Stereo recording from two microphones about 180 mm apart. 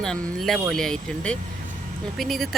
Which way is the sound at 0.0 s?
Centre (ahead or behind).